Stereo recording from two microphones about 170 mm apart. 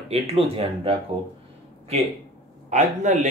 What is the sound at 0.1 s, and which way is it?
Speech, 35° right (ahead or behind).